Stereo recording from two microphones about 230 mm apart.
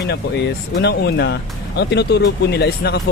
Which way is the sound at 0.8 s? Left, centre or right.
Left.